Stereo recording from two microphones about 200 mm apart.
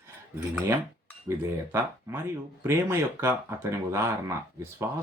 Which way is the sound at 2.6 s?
10° right (ahead or behind).